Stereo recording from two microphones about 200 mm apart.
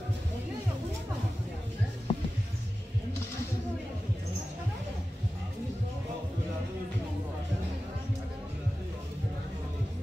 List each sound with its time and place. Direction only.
2.1 s music: 30° left (ahead or behind)